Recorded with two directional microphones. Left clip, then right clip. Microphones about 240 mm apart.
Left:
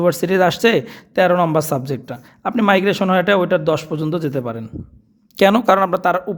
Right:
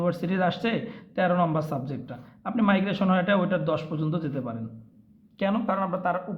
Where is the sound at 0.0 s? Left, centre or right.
Left.